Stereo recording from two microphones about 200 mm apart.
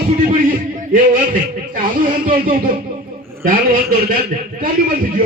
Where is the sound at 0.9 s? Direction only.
45° right (ahead or behind).